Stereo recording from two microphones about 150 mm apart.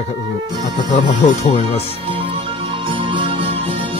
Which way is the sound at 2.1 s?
35° right (ahead or behind).